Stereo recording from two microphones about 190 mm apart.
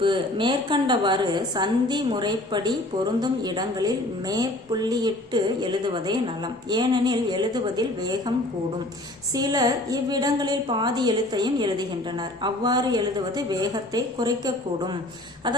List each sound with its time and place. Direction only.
0.0 s a woman's voice: 25° right (ahead or behind)
9.3 s a woman's voice: 20° right (ahead or behind)